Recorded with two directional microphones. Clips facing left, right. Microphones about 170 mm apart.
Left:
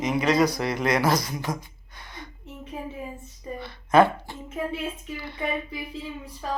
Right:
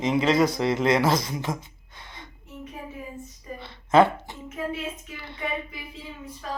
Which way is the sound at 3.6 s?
25° right (ahead or behind).